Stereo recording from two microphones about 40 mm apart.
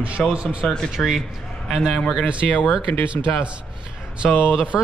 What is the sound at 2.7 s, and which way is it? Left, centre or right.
Speech, right.